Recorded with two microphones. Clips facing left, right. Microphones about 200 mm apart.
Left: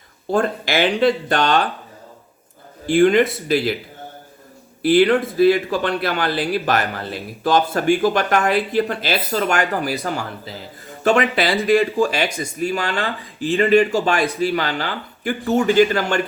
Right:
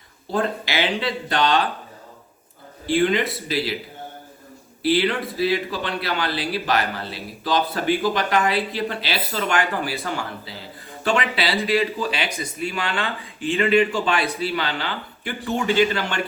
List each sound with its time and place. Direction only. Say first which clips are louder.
0.3 s speech: left 4 dB; 50° left (ahead or behind)
2.8 s speech: left 6 dB; 50° left (ahead or behind)
4.8 s speech: left 6 dB; 50° left (ahead or behind)